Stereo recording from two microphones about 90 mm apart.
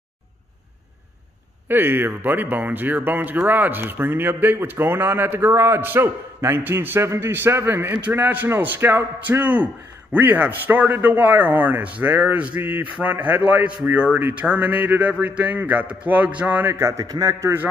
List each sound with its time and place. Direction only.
1.7 s a man's voice: 25° right (ahead or behind)